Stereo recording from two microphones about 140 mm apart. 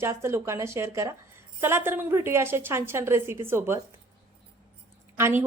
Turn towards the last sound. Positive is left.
turn(degrees=-15)  # may be behind; listen again after turning